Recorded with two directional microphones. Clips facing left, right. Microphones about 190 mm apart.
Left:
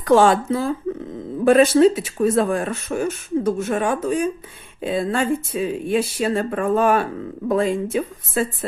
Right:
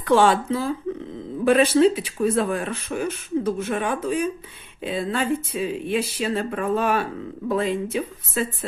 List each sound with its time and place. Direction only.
0.0 s speech: 45° left (ahead or behind)